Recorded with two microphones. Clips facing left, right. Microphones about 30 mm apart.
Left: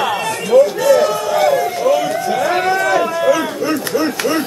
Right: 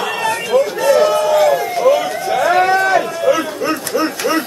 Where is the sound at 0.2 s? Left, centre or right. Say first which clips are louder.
Left 3 dB; centre.